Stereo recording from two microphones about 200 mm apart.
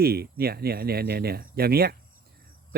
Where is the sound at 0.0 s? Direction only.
50° right (ahead or behind).